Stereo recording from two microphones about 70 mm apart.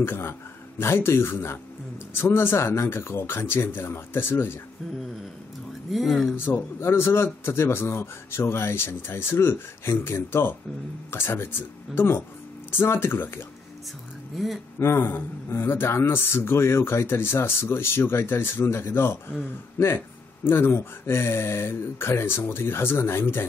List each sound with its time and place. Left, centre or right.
0.0 s a man's voice: left
5.9 s speech: centre
6.3 s a man's voice: left
14.8 s a man's voice: left